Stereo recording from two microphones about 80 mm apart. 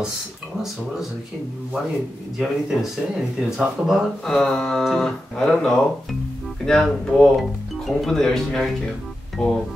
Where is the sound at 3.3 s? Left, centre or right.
Centre.